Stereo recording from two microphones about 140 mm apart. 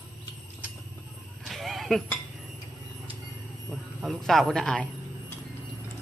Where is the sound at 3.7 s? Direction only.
Centre (ahead or behind).